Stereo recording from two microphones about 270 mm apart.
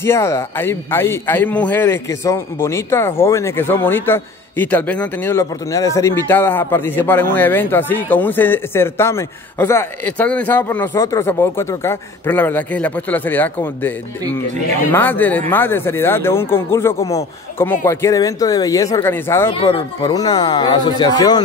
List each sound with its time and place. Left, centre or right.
0.0 s a man's voice: centre
19.5 s a man's voice: left